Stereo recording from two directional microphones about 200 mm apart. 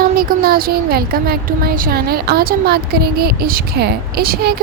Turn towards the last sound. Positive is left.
turn(degrees=-50)  # may be behind; listen again after turning